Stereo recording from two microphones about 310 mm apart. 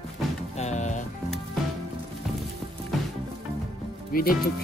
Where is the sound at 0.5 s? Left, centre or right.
Left.